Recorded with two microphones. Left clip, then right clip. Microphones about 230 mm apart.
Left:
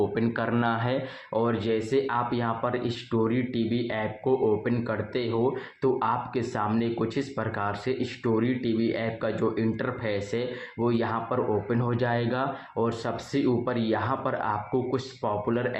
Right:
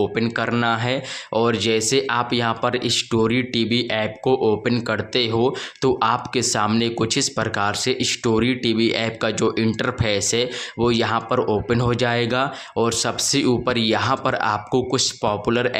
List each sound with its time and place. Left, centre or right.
0.0 s speech: right